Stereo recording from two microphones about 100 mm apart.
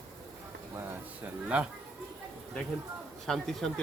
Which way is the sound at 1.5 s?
15° right (ahead or behind).